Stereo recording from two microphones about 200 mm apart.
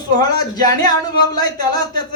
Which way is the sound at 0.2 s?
20° left (ahead or behind).